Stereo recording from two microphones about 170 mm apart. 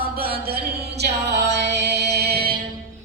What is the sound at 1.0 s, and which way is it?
Music, 80° right.